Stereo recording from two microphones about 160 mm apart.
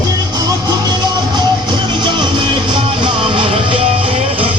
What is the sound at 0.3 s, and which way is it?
Music, 25° right (ahead or behind).